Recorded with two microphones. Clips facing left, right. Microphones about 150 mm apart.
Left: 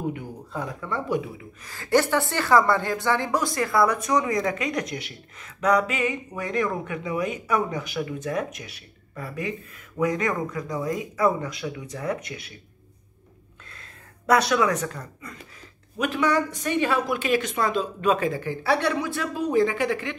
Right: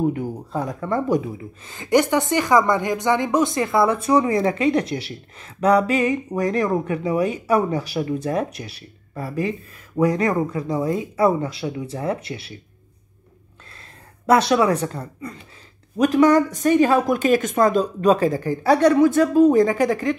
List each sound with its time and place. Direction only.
0.1 s a woman's voice: 40° right (ahead or behind)
1.7 s a woman's voice: 20° right (ahead or behind)
13.7 s speech: 30° right (ahead or behind)